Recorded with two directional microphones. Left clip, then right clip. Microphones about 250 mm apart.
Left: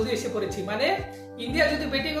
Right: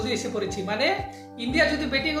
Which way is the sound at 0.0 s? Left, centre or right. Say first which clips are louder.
Left 1 dB; centre.